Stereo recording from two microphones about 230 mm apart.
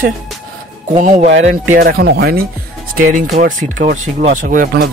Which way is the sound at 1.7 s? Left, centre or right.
Right.